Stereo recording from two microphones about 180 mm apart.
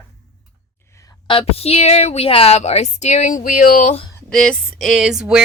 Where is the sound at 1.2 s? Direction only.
30° left (ahead or behind).